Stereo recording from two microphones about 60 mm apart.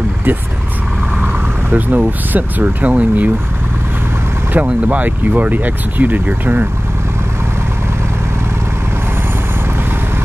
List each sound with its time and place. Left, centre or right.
1.2 s vehicle: right
2.0 s speech: right
4.6 s speech: right